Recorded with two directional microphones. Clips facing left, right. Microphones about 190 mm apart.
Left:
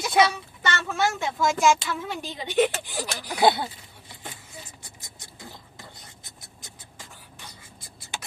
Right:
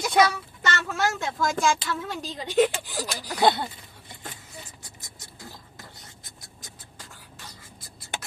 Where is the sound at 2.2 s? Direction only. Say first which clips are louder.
Right 1 dB; 25° left (ahead or behind).